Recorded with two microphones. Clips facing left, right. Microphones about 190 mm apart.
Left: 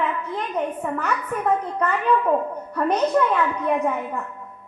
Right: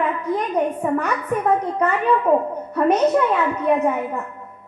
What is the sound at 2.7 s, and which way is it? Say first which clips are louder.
Speech: right 5 dB; 10° right (ahead or behind).